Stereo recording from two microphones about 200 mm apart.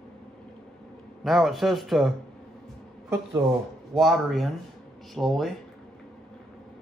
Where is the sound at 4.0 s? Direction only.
Centre (ahead or behind).